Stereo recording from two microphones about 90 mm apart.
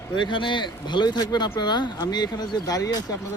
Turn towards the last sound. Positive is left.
turn(degrees=40)  # may be behind; listen again after turning